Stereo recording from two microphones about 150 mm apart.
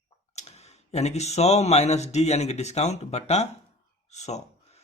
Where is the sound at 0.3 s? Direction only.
45° left (ahead or behind).